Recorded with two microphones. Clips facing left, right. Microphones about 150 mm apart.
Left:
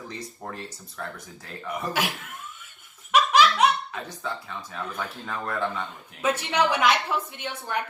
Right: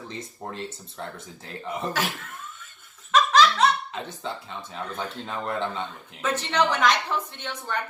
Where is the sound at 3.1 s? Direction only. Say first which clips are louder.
Even; 10° left (ahead or behind).